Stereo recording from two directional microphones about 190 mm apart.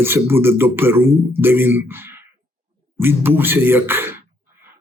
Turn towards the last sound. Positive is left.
turn(degrees=-10)  # may be behind; listen again after turning